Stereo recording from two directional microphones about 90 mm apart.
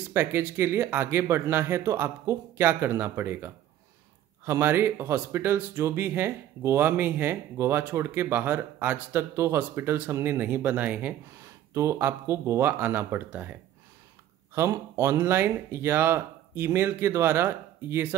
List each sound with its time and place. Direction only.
0.1 s speech: 25° right (ahead or behind)
9.3 s speech: 30° right (ahead or behind)
11.7 s speech: 35° right (ahead or behind)
14.5 s speech: 30° right (ahead or behind)